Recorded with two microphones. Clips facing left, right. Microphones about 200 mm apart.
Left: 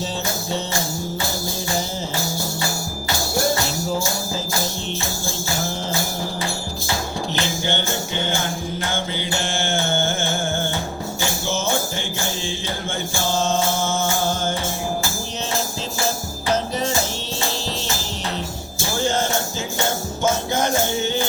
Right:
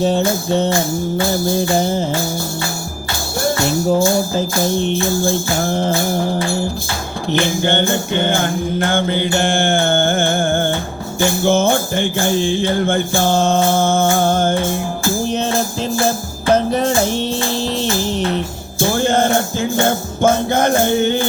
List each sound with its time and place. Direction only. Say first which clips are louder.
0.0 s music: right 11 dB; 55° right (ahead or behind)
3.3 s music: right 6 dB; 55° right (ahead or behind)